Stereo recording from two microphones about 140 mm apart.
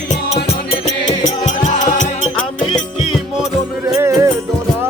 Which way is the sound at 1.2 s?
60° left (ahead or behind).